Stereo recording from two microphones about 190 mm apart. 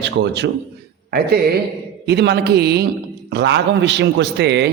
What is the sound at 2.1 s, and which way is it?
A man's voice, 60° right (ahead or behind).